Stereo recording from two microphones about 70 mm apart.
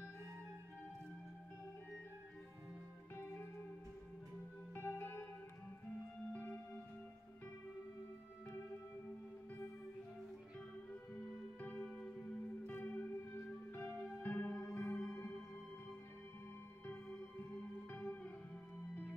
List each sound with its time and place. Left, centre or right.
3.2 s music: left
4.7 s music: left
6.3 s music: left
11.1 s music: centre
14.6 s music: left
17.9 s music: left